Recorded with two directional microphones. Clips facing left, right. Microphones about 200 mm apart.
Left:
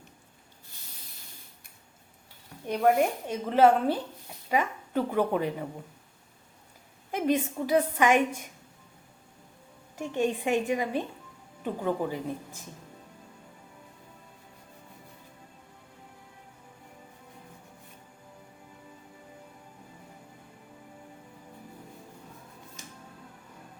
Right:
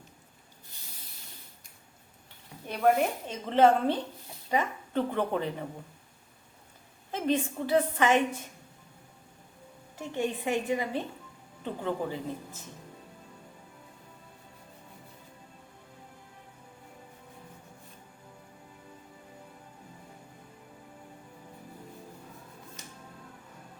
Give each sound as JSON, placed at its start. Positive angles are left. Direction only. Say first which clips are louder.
{"t": 2.6, "sound": "a woman's voice", "louder": "left 2 dB", "side_deg": 10}
{"t": 7.1, "sound": "a woman's voice", "louder": "left 2 dB", "side_deg": 10}
{"t": 10.0, "sound": "a woman's voice", "louder": "left 3 dB", "side_deg": 15}